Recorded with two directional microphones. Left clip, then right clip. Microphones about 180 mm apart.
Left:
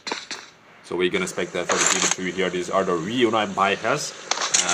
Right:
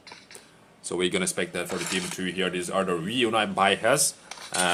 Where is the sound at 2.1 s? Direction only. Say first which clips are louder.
Left 4 dB; 20° left (ahead or behind).